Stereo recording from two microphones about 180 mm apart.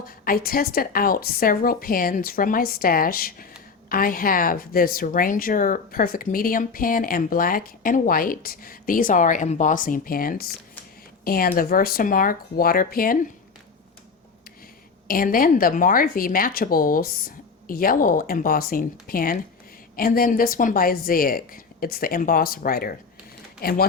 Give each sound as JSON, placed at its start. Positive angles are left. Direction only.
{"t": 0.3, "sound": "a woman's voice", "side_deg": 55}
{"t": 15.0, "sound": "a woman's voice", "side_deg": 55}